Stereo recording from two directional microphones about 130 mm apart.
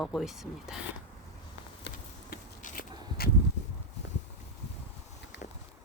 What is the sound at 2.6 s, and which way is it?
Walk, 80° left.